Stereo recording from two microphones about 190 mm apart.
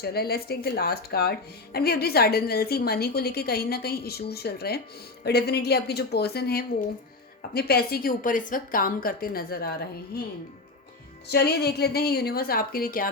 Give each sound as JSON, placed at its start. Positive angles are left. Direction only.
{"t": 0.0, "sound": "a woman's voice", "side_deg": 55}
{"t": 11.3, "sound": "a woman's voice", "side_deg": 60}